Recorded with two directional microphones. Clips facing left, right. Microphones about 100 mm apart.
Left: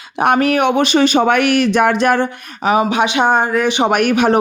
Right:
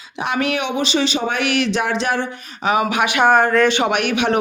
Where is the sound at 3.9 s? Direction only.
45° left (ahead or behind).